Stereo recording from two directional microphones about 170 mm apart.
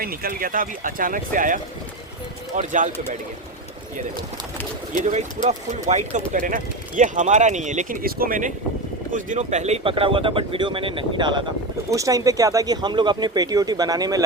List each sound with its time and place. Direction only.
0.0 s speech: 60° right (ahead or behind)
4.9 s speech: 45° right (ahead or behind); by 14.2 s 20° right (ahead or behind)